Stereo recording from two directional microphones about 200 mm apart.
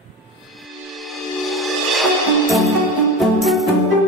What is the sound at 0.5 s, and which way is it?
Music, centre (ahead or behind).